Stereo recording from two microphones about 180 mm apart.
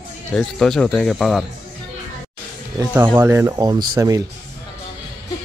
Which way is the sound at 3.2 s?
15° right (ahead or behind).